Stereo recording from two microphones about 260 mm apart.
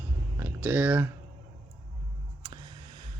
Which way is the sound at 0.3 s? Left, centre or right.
Centre.